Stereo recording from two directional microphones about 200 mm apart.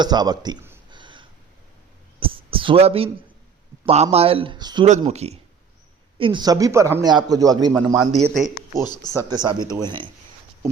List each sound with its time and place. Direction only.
0.0 s speech: 20° right (ahead or behind)
0.9 s a sound: 25° right (ahead or behind)
3.8 s speech: 30° right (ahead or behind)
4.9 s speech: 35° right (ahead or behind)
7.9 s speech: centre (ahead or behind)
8.8 s speech: 20° left (ahead or behind)
9.1 s speech: 20° right (ahead or behind)